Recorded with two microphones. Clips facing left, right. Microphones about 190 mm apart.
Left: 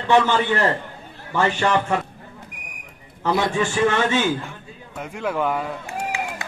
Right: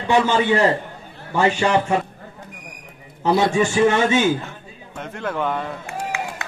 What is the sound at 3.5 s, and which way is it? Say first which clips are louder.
Speech: right 3 dB; 20° right (ahead or behind).